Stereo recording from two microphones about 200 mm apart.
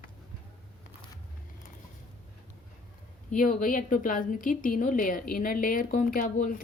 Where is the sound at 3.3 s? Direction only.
45° left (ahead or behind).